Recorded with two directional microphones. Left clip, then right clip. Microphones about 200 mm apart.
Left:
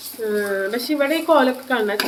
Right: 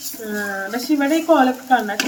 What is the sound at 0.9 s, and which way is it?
Speech, 30° left (ahead or behind).